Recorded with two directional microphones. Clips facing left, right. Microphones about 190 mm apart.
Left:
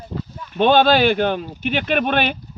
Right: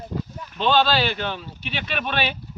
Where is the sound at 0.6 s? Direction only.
55° left (ahead or behind).